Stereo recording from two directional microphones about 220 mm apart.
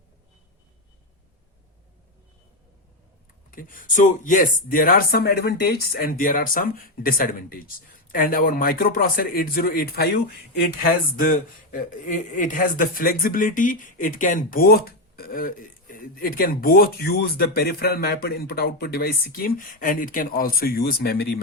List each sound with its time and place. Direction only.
3.5 s a man's voice: 40° left (ahead or behind)